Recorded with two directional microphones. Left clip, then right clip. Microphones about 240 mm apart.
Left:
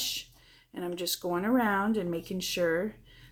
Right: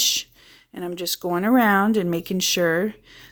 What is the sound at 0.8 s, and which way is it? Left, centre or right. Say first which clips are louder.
Speech: right 6 dB; right.